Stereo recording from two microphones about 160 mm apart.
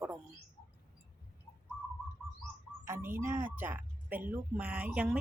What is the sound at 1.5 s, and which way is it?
Whistling, 20° left (ahead or behind).